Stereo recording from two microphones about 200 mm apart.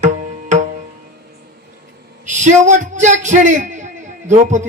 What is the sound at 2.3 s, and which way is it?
A man's voice, 35° right (ahead or behind).